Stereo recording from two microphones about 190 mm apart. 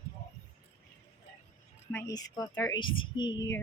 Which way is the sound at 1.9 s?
15° left (ahead or behind).